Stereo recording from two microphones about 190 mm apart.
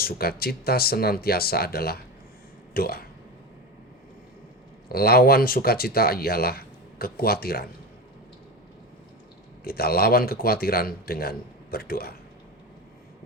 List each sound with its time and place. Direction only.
0.0 s speech: 55° left (ahead or behind)
4.9 s speech: 55° left (ahead or behind)
9.6 s speech: 55° left (ahead or behind)